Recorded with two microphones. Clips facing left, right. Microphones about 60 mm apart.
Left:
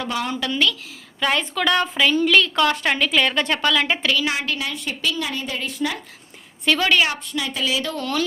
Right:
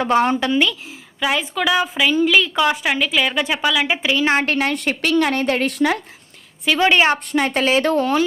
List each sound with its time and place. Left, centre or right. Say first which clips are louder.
0.0 s speech: right 9 dB; right
0.3 s a woman's voice: right 4 dB; right
1.2 s a woman's voice: right 1 dB; centre
4.2 s a woman's voice: right 7 dB; right
6.7 s a woman's voice: right 6 dB; right
7.3 s a woman's voice: right 7 dB; right